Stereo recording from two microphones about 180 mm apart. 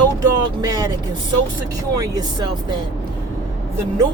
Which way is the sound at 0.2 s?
20° right (ahead or behind).